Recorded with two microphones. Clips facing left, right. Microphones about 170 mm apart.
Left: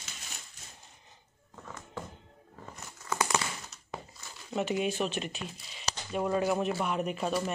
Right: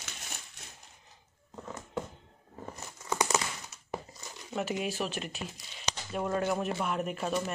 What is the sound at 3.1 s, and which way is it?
Crumpling, 15° right (ahead or behind).